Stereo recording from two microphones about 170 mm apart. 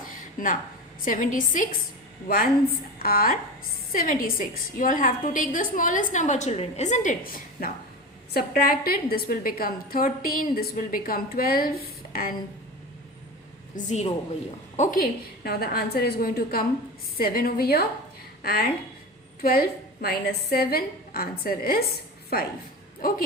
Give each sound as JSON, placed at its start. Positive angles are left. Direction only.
{"t": 1.0, "sound": "a woman's voice", "side_deg": 50}
{"t": 7.6, "sound": "a woman's voice", "side_deg": 60}
{"t": 13.7, "sound": "a woman's voice", "side_deg": 45}
{"t": 15.4, "sound": "a woman's voice", "side_deg": 65}